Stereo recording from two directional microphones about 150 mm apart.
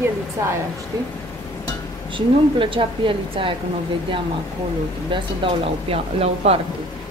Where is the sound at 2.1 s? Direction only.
35° right (ahead or behind).